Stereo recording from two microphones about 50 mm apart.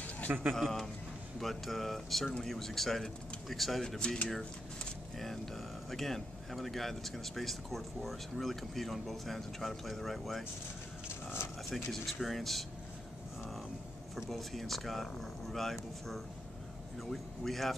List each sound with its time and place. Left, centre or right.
0.5 s speech: centre
5.2 s speech: centre
11.7 s speech: centre
14.1 s speech: centre